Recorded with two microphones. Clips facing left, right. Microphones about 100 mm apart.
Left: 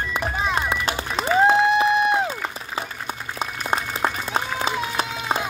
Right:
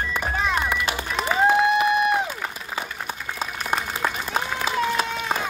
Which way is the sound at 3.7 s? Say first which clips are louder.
Left 2 dB; 25° left (ahead or behind).